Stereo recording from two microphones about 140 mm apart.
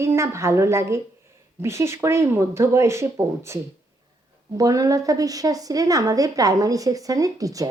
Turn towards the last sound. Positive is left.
turn(degrees=-25)  # may be behind; listen again after turning